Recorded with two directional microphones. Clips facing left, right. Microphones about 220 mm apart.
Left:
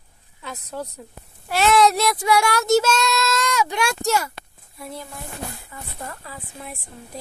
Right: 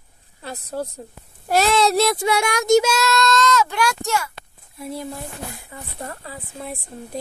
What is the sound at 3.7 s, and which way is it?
Speech, 35° left (ahead or behind).